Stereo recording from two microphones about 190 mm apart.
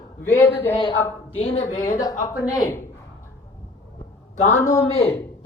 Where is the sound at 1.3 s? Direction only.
30° left (ahead or behind).